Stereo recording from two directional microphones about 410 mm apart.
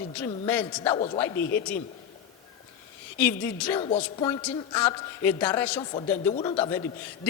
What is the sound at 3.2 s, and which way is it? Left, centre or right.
A woman's voice, centre.